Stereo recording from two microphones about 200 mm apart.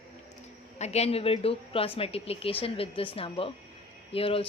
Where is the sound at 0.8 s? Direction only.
30° left (ahead or behind).